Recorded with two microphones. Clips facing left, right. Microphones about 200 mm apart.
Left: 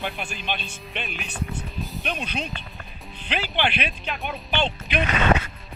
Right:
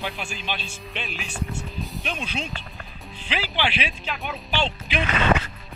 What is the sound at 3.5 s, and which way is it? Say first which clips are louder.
Speech: left 1 dB; 55° left (ahead or behind).